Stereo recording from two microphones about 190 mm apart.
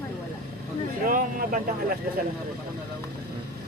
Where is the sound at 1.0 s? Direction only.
45° right (ahead or behind).